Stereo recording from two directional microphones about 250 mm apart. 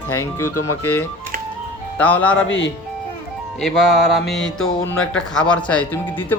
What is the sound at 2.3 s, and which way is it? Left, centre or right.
Speech, left.